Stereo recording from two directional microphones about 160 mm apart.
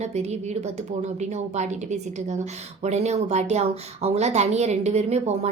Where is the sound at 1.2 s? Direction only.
45° right (ahead or behind).